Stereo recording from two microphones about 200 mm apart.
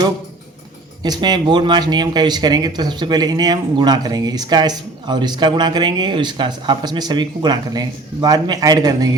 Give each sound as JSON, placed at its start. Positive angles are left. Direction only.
{"t": 1.0, "sound": "speech", "side_deg": -20}